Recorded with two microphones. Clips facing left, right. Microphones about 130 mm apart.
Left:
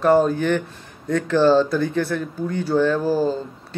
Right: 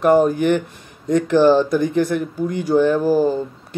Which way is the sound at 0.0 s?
15° right (ahead or behind).